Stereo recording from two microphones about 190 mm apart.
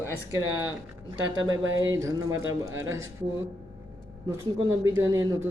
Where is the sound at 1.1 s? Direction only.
20° right (ahead or behind).